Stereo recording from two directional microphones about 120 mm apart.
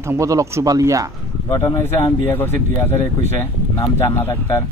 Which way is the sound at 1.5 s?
35° left (ahead or behind).